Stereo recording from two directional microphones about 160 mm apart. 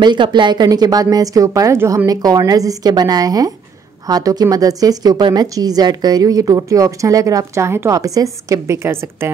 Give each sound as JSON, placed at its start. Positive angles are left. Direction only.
{"t": 0.0, "sound": "speech", "side_deg": -30}